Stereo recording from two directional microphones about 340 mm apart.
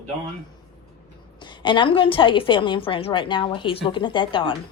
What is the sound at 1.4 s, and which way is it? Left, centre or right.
A woman's voice, centre.